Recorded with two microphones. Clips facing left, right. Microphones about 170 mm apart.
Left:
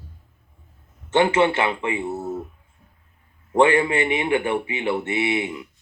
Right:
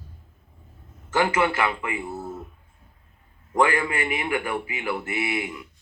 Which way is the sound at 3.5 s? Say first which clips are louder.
Left 5 dB; 25° left (ahead or behind).